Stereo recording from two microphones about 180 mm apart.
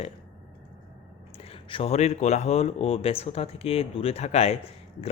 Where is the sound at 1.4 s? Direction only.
30° left (ahead or behind).